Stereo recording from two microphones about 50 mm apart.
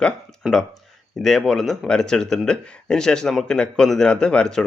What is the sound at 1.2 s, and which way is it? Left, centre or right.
Speech, centre.